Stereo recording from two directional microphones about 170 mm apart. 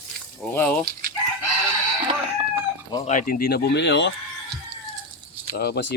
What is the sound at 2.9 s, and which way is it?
Speech, 35° left (ahead or behind).